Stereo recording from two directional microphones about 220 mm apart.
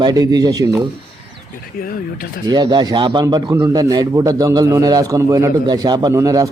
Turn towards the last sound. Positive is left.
turn(degrees=-15)  # may be behind; listen again after turning